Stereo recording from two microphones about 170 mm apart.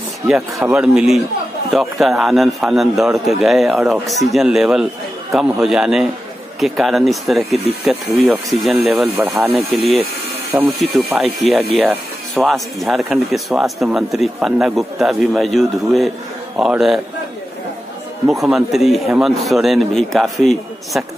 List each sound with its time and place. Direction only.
0.3 s speech: 5° right (ahead or behind)
10.5 s speech: 20° right (ahead or behind)
11.1 s speech: 5° right (ahead or behind)
18.3 s speech: centre (ahead or behind)